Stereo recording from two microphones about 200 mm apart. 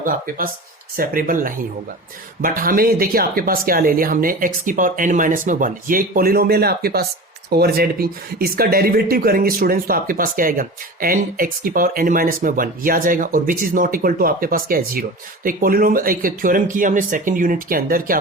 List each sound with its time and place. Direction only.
0.0 s speech: 45° right (ahead or behind)